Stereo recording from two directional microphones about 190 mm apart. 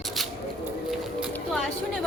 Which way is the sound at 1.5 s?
Centre (ahead or behind).